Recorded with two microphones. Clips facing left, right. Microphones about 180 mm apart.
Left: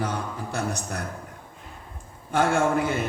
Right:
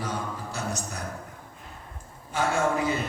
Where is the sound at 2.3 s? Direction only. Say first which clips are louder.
Left 5 dB; 60° left (ahead or behind).